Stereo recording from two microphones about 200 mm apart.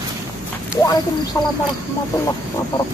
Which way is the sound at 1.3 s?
15° left (ahead or behind).